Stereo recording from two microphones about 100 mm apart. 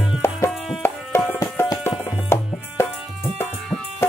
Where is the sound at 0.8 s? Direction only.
25° left (ahead or behind).